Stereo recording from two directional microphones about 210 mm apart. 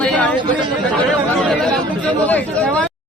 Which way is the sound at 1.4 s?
5° left (ahead or behind).